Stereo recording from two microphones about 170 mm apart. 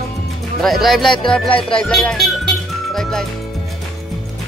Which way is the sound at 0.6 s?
Centre (ahead or behind).